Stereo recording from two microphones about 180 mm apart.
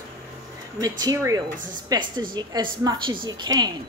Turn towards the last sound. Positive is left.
turn(degrees=-25)  # may be behind; listen again after turning